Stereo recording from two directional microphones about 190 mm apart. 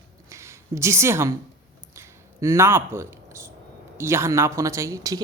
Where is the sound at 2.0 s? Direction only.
15° right (ahead or behind).